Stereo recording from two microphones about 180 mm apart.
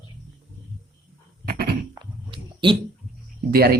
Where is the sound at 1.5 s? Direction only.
60° right (ahead or behind).